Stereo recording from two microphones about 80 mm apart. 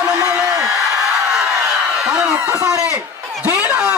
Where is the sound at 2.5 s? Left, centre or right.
Right.